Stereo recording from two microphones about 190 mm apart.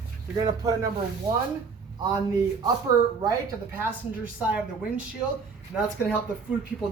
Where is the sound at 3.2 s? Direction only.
15° right (ahead or behind).